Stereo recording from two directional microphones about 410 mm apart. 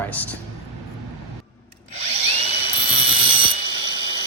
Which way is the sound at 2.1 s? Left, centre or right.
Centre.